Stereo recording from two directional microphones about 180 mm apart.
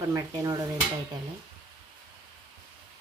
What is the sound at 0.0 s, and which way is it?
Speech, 20° right (ahead or behind).